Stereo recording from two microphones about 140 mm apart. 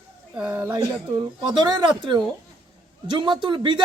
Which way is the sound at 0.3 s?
10° right (ahead or behind).